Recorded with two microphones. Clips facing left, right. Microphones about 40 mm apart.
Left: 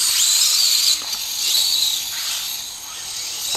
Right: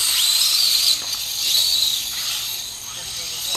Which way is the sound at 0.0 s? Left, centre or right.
Centre.